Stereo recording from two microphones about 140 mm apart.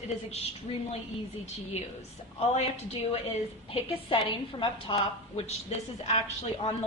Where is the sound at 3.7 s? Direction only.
45° left (ahead or behind).